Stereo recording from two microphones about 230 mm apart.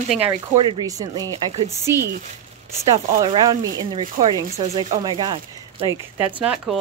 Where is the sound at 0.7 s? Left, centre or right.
Centre.